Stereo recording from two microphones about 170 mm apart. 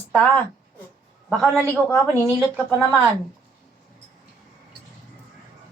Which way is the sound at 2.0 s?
15° right (ahead or behind).